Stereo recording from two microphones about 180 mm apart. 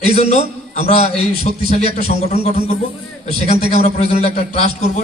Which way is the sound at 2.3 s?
35° left (ahead or behind).